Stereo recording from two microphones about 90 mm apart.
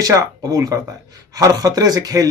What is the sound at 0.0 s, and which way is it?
Speech, 35° right (ahead or behind).